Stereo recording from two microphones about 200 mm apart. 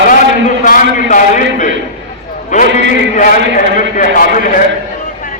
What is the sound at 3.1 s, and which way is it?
A man's voice, 40° left (ahead or behind).